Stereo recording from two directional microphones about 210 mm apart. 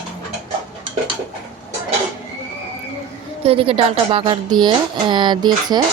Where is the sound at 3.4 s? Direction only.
25° right (ahead or behind).